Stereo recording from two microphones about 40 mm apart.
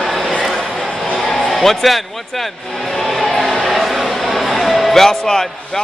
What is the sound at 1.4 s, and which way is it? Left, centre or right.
Speech, centre.